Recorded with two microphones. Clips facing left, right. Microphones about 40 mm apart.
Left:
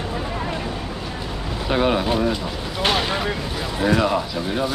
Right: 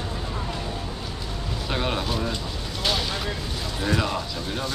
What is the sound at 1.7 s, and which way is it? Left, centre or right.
Speech, centre.